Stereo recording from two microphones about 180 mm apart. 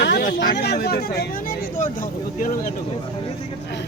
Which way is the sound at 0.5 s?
65° left (ahead or behind).